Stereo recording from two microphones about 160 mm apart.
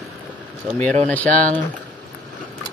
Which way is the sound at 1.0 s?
10° left (ahead or behind).